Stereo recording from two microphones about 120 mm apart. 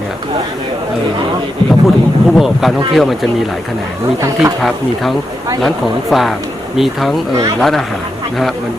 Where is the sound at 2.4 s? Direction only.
Centre (ahead or behind).